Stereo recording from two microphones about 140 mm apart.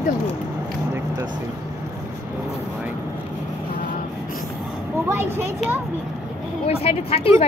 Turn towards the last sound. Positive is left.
turn(degrees=45)  # may be behind; listen again after turning